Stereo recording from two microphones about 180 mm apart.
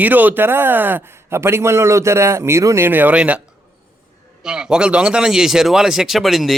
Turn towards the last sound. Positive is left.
turn(degrees=0)  # may be behind; listen again after turning